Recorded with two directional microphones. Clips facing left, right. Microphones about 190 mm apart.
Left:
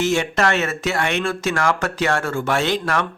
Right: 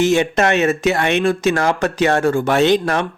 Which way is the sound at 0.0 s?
20° right (ahead or behind).